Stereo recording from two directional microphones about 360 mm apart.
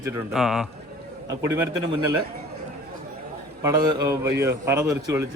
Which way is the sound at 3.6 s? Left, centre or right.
Centre.